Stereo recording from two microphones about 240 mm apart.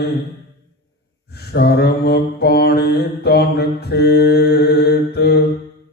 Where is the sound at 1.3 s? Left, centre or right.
Left.